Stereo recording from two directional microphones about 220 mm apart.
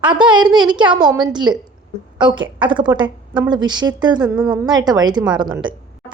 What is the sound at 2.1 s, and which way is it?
A woman's voice, 20° right (ahead or behind).